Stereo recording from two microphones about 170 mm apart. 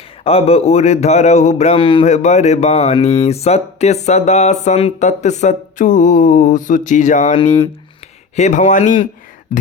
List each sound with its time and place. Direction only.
0.3 s speech: 35° left (ahead or behind)
2.0 s speech: 40° left (ahead or behind)